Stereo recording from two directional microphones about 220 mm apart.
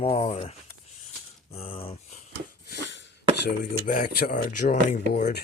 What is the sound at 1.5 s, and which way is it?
Speech, 25° left (ahead or behind).